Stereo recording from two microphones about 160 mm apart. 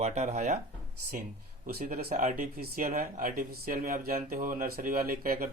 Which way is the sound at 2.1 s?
60° right (ahead or behind).